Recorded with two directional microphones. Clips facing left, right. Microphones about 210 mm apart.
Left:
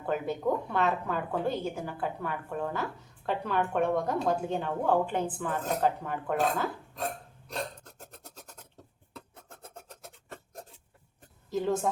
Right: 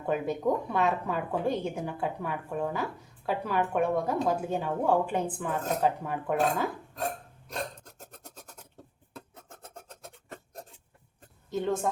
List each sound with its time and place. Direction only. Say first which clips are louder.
0.0 s a woman's voice: right 2 dB; 10° right (ahead or behind)
11.5 s a woman's voice: even; centre (ahead or behind)